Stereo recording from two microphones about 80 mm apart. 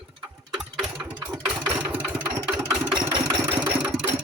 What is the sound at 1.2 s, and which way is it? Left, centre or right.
Engine, centre.